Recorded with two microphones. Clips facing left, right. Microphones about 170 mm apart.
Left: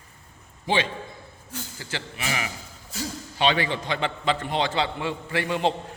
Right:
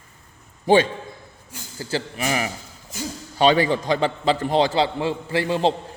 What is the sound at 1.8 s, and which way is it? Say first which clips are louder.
A man's voice: right 9 dB; 35° right (ahead or behind).